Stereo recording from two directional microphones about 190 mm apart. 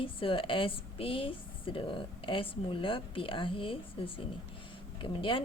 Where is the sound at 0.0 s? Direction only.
30° left (ahead or behind).